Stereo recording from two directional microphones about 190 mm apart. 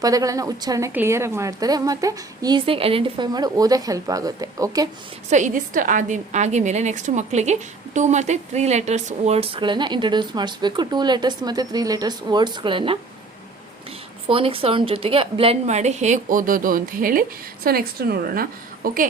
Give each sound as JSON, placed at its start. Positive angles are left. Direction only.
{"t": 0.0, "sound": "a woman's voice", "side_deg": -20}
{"t": 5.3, "sound": "a woman's voice", "side_deg": -40}
{"t": 14.3, "sound": "a woman's voice", "side_deg": -30}